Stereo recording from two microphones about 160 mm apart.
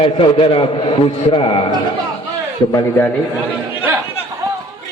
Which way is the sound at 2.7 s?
15° left (ahead or behind).